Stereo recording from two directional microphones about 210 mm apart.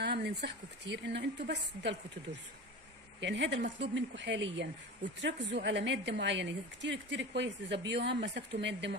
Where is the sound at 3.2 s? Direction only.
55° right (ahead or behind).